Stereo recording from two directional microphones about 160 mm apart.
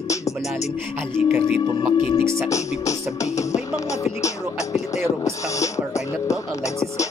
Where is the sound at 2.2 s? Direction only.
15° right (ahead or behind).